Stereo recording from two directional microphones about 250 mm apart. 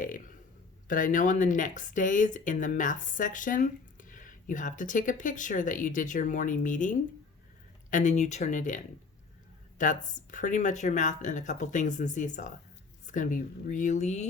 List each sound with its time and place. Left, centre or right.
0.9 s speech: left